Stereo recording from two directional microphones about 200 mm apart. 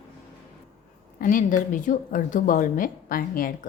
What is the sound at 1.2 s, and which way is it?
A woman's voice, 40° left (ahead or behind).